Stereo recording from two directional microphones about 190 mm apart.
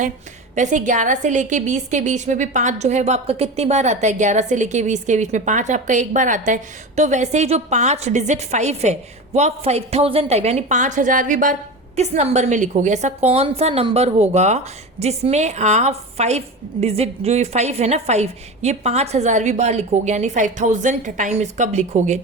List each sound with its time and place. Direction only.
0.5 s a woman's voice: 40° right (ahead or behind)